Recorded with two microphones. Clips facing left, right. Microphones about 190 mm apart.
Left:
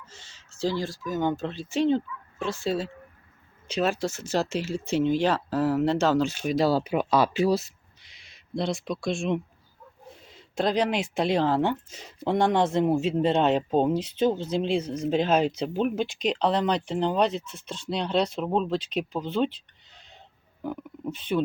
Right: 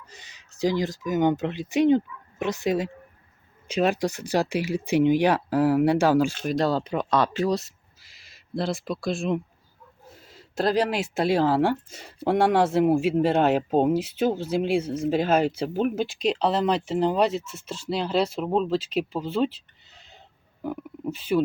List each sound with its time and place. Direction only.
0.0 s speech: 15° right (ahead or behind)
6.3 s speech: centre (ahead or behind)
20.6 s speech: 5° right (ahead or behind)